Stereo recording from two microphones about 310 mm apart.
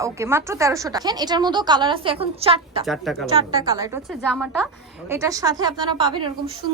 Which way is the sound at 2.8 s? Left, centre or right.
Centre.